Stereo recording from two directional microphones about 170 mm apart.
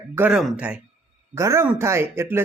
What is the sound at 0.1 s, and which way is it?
Speech, 10° right (ahead or behind).